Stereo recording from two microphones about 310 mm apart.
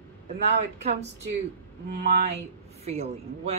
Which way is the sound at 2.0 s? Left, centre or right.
Right.